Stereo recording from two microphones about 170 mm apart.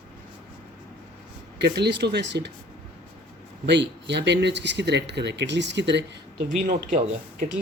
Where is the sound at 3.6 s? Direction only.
90° right.